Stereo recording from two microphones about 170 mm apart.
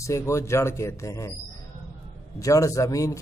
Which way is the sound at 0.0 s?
15° left (ahead or behind).